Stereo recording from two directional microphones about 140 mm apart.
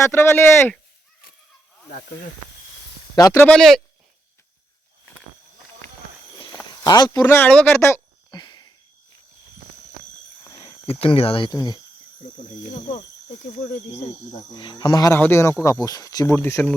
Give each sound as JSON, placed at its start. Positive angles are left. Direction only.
{"t": 0.0, "sound": "speech", "side_deg": 15}
{"t": 3.2, "sound": "speech", "side_deg": 25}
{"t": 3.4, "sound": "speech", "side_deg": 5}
{"t": 6.8, "sound": "speech", "side_deg": 30}
{"t": 7.3, "sound": "speech", "side_deg": 10}
{"t": 8.3, "sound": "a sound", "side_deg": 30}
{"t": 11.0, "sound": "speech", "side_deg": 40}
{"t": 11.5, "sound": "speech", "side_deg": 30}
{"t": 14.3, "sound": "speech", "side_deg": 30}
{"t": 15.1, "sound": "speech", "side_deg": 15}